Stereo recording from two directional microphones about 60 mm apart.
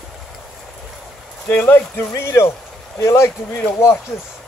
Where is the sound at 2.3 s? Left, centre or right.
Left.